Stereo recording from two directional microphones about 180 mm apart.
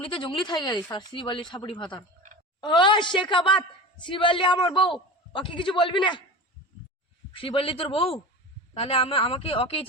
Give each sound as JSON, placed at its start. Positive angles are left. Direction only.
{"t": 0.0, "sound": "a man's voice", "side_deg": 30}
{"t": 7.3, "sound": "a man's voice", "side_deg": 30}